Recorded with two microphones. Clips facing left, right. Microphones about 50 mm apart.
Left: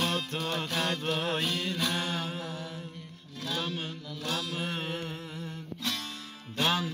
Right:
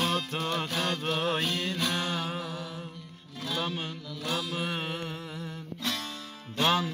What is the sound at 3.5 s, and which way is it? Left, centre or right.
Music, centre.